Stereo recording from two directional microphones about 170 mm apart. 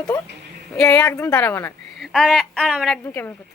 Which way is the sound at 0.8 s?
5° left (ahead or behind).